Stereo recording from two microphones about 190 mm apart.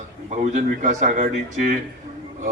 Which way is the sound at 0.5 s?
40° right (ahead or behind).